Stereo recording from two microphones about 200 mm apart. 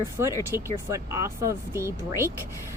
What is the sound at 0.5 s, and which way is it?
Speech, 15° right (ahead or behind).